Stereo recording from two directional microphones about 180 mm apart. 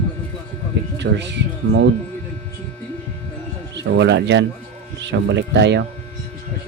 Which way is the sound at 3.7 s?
75° right (ahead or behind).